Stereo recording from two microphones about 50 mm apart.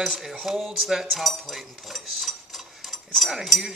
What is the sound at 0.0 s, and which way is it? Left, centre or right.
Speech, centre.